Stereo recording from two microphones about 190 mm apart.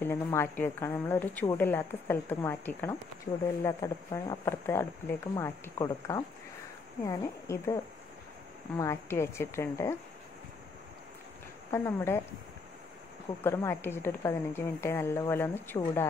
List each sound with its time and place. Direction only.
0.0 s a woman's voice: 15° left (ahead or behind)
11.7 s a woman's voice: 15° left (ahead or behind)
13.4 s a woman's voice: 15° left (ahead or behind)